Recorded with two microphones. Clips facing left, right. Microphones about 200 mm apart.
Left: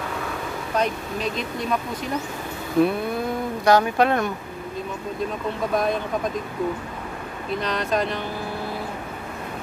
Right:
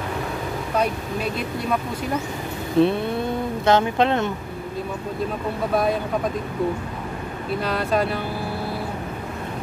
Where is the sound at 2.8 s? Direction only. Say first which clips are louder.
Right 1 dB; 25° right (ahead or behind).